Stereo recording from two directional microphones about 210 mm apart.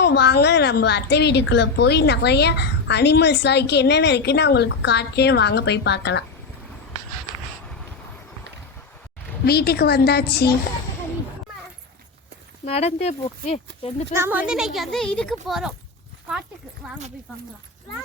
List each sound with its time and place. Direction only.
0.0 s a woman's voice: 55° left (ahead or behind)
9.5 s a woman's voice: 50° left (ahead or behind)
12.6 s speech: 30° left (ahead or behind)
14.1 s speech: 10° right (ahead or behind)